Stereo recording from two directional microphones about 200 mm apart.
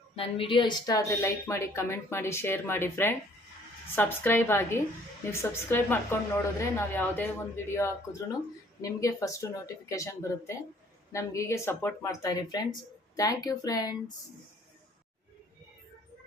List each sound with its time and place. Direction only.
0.2 s speech: 25° left (ahead or behind)